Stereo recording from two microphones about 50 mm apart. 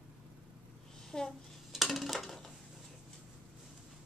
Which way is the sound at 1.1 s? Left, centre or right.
Centre.